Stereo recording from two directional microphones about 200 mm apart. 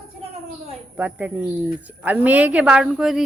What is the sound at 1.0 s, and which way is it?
A woman's voice, 5° right (ahead or behind).